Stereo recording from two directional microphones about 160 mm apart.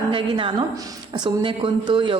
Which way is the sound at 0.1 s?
30° right (ahead or behind).